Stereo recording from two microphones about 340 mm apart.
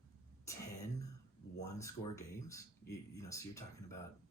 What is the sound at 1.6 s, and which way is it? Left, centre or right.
Speech, centre.